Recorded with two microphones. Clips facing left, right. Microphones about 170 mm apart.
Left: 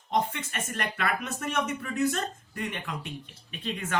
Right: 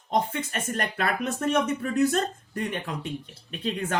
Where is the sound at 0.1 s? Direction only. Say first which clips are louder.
Right 2 dB; 35° right (ahead or behind).